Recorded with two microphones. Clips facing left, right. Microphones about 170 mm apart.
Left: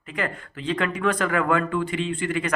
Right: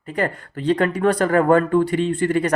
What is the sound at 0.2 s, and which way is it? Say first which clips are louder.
Speech: right 6 dB; 40° right (ahead or behind).